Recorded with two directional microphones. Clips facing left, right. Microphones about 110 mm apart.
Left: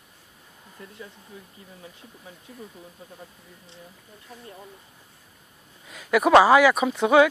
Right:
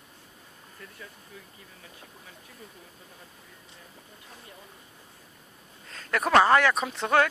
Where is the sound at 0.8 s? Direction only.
25° left (ahead or behind).